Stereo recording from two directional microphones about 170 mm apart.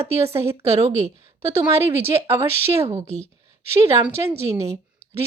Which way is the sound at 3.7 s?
15° right (ahead or behind).